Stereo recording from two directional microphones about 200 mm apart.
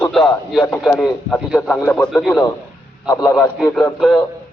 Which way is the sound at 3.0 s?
15° left (ahead or behind).